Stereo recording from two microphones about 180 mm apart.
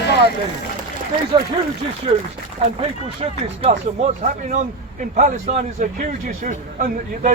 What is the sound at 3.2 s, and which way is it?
Speech, 35° right (ahead or behind).